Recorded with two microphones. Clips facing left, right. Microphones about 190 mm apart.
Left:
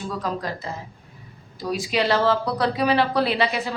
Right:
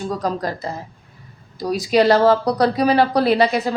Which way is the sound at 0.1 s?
40° right (ahead or behind).